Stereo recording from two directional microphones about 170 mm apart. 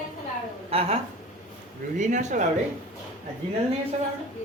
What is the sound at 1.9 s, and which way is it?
Speech, 45° right (ahead or behind).